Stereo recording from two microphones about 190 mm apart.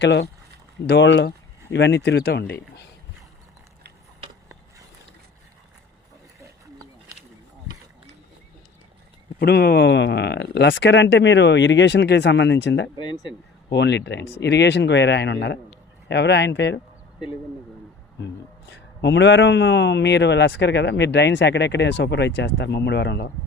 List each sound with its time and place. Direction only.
0.0 s a man's voice: 65° left (ahead or behind)
6.4 s a sound: 15° right (ahead or behind)
9.4 s a man's voice: 60° left (ahead or behind)
18.2 s a man's voice: 65° left (ahead or behind)